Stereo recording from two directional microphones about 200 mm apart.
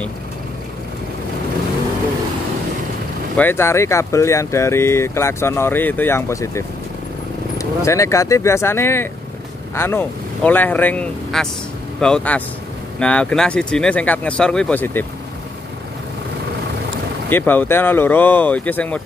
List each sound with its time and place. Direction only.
3.3 s speech: 10° left (ahead or behind)
17.3 s speech: 10° left (ahead or behind)